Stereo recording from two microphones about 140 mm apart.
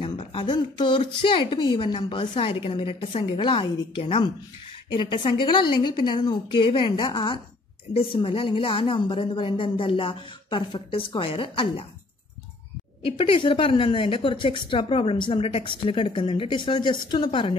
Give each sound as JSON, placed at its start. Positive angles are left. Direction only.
{"t": 0.0, "sound": "a woman's voice", "side_deg": 40}
{"t": 13.0, "sound": "a woman's voice", "side_deg": 40}